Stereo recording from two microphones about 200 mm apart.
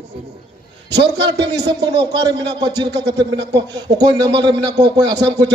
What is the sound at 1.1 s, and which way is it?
A man's voice, 20° right (ahead or behind).